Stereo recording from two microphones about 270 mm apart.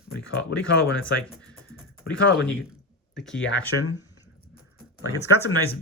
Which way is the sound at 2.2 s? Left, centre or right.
Left.